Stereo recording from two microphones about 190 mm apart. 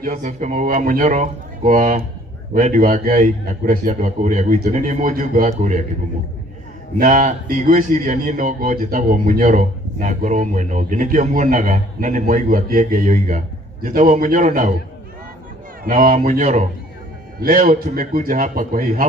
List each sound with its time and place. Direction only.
0.0 s a man's voice: 40° right (ahead or behind)
7.0 s a man's voice: 45° right (ahead or behind)
15.8 s speech: 50° right (ahead or behind)
16.3 s a man's voice: 35° right (ahead or behind)
17.4 s speech: 50° right (ahead or behind)